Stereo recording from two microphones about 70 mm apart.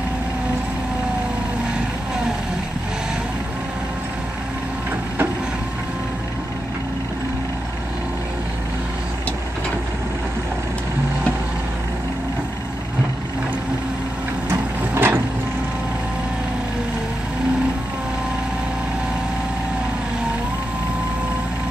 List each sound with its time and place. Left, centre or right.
14.5 s printer: right